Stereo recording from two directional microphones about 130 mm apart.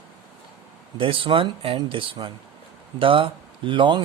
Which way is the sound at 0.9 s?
40° right (ahead or behind).